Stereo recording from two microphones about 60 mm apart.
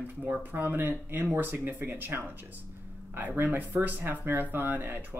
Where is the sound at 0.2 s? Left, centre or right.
Right.